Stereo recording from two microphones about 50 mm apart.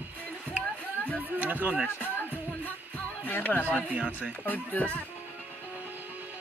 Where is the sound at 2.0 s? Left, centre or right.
Left.